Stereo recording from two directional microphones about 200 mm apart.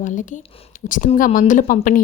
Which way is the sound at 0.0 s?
40° left (ahead or behind).